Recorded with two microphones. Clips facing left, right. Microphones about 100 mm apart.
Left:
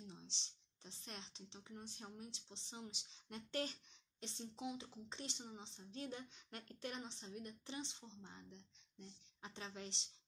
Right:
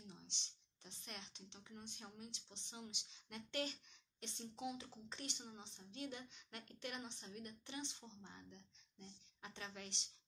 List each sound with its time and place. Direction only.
0.0 s speech: 30° left (ahead or behind)
5.8 s a woman's voice: 35° left (ahead or behind)